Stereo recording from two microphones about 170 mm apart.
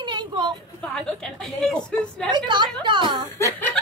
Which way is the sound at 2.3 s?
25° right (ahead or behind).